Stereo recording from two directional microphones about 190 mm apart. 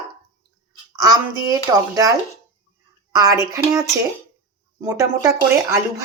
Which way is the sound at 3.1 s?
20° right (ahead or behind).